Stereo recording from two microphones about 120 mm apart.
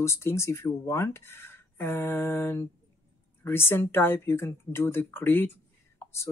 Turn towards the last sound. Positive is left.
turn(degrees=25)  # may be behind; listen again after turning